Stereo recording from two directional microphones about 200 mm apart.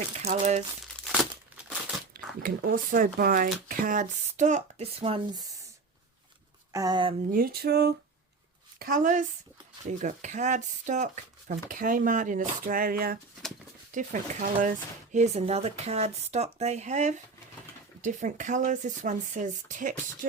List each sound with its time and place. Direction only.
0.2 s speech: 35° right (ahead or behind)
1.0 s crumpling: centre (ahead or behind)
2.4 s speech: 45° right (ahead or behind); by 5.6 s 20° right (ahead or behind)
6.7 s speech: 20° right (ahead or behind)
7.3 s speech: 45° right (ahead or behind)
8.8 s speech: 40° right (ahead or behind)